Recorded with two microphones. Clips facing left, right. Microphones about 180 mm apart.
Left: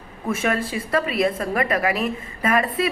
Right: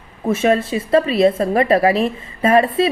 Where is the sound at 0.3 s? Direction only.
25° right (ahead or behind).